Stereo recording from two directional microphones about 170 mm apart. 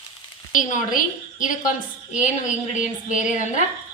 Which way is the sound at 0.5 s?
50° left (ahead or behind).